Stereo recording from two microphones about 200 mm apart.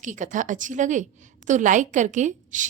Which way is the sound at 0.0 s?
40° right (ahead or behind).